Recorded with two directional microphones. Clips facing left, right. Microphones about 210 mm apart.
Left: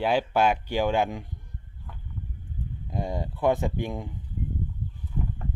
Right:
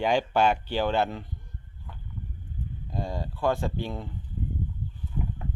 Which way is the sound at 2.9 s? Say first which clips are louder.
Left 2 dB; 20° left (ahead or behind).